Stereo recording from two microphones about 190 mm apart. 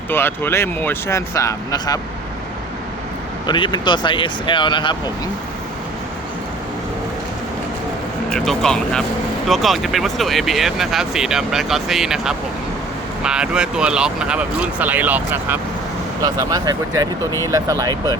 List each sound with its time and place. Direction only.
0.1 s speech: 10° left (ahead or behind)
3.4 s speech: 25° left (ahead or behind)
8.3 s speech: 5° left (ahead or behind)
16.2 s speech: 20° right (ahead or behind)